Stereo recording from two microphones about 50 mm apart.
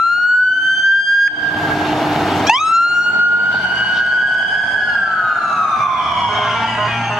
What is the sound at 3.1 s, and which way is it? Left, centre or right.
Fire engine, right.